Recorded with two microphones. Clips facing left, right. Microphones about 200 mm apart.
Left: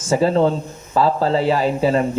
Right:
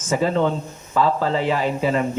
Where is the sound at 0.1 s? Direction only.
35° left (ahead or behind).